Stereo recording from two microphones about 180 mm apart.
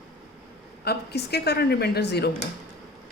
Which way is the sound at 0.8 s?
65° left (ahead or behind).